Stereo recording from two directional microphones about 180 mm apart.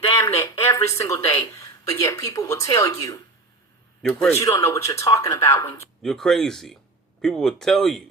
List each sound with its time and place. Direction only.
0.3 s speech: 15° left (ahead or behind)
4.0 s speech: centre (ahead or behind)
4.3 s speech: 15° left (ahead or behind)
6.0 s speech: 5° left (ahead or behind)